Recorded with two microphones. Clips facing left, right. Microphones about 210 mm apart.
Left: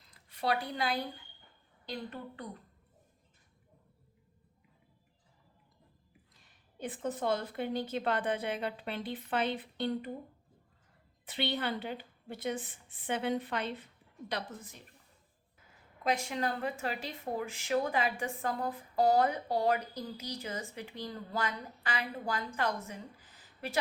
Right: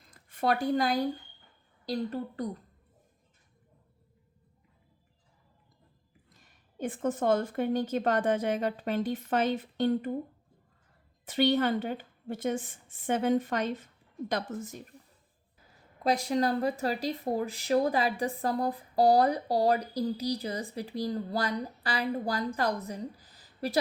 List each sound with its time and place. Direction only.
0.0 s speech: 50° right (ahead or behind)
6.3 s a woman's voice: 45° right (ahead or behind)
11.3 s a woman's voice: 45° right (ahead or behind)
16.0 s speech: 35° right (ahead or behind)